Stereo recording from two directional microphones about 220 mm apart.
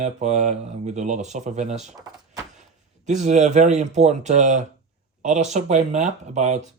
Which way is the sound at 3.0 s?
30° right (ahead or behind).